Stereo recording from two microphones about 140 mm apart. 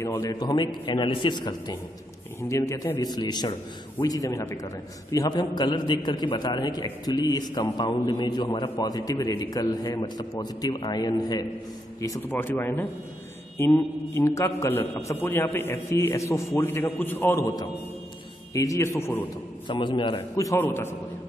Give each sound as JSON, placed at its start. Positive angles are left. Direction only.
{"t": 0.0, "sound": "a man's voice", "side_deg": 20}
{"t": 2.4, "sound": "a man's voice", "side_deg": 20}
{"t": 19.7, "sound": "a man's voice", "side_deg": 35}
{"t": 20.3, "sound": "a man's voice", "side_deg": 20}